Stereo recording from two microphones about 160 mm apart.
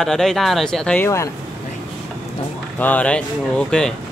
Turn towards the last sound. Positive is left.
turn(degrees=5)  # may be behind; listen again after turning